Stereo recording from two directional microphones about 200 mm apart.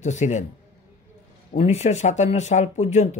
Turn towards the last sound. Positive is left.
turn(degrees=35)  # may be behind; listen again after turning